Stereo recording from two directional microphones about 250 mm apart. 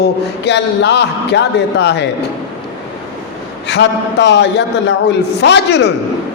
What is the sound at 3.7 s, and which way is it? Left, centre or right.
A man's voice, left.